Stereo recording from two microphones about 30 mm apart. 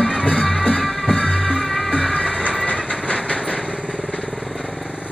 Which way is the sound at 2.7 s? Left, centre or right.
Left.